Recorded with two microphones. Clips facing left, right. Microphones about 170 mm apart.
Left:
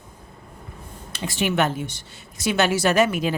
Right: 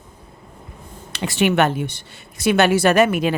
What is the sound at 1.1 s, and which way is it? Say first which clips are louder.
A woman's voice: right 5 dB; 70° right (ahead or behind).